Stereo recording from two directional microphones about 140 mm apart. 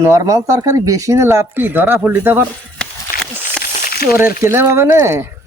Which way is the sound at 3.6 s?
85° left.